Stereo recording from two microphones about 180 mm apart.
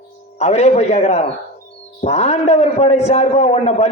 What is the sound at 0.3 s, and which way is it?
A man's voice, 35° left (ahead or behind).